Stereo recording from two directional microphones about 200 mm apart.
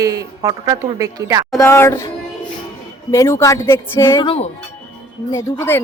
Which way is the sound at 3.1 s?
15° left (ahead or behind).